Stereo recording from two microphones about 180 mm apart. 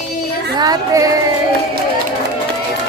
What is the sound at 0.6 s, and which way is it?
Speech, 20° right (ahead or behind).